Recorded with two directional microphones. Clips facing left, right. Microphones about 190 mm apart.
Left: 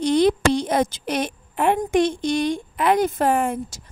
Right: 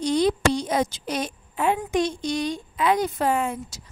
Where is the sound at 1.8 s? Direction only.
55° left (ahead or behind).